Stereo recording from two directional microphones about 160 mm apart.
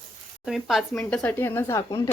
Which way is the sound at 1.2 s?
15° left (ahead or behind).